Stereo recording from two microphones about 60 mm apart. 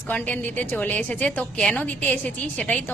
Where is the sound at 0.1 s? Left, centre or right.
Left.